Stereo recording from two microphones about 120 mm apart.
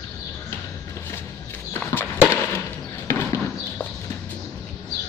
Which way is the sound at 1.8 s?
15° left (ahead or behind).